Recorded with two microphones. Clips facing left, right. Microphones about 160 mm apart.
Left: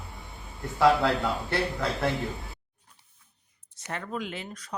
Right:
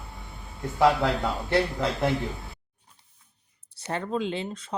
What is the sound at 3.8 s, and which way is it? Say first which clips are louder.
Speech: right 6 dB; 30° right (ahead or behind).